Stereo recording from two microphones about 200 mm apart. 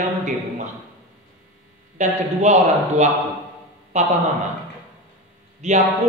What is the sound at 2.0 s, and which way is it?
A man's voice, 35° right (ahead or behind).